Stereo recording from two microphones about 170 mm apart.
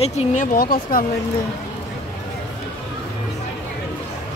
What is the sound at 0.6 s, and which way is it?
Speech, 60° left (ahead or behind).